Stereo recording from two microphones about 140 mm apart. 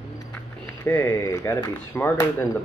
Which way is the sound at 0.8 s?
20° left (ahead or behind).